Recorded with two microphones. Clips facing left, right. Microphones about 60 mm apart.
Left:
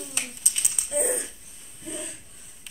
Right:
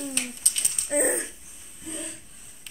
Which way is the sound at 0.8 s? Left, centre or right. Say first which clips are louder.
Right 2 dB; right.